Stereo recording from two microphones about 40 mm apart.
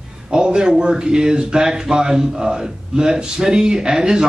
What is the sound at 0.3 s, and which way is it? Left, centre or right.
Speech, right.